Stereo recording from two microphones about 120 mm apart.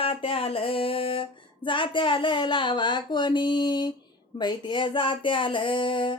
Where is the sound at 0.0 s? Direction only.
50° left (ahead or behind).